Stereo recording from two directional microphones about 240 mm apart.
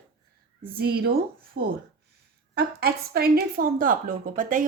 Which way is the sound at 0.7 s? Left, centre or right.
Right.